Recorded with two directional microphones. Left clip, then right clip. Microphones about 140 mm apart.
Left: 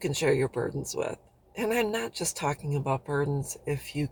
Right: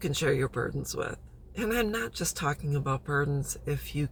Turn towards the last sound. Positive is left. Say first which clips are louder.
# left 2 dB
turn(degrees=20)  # may be behind; listen again after turning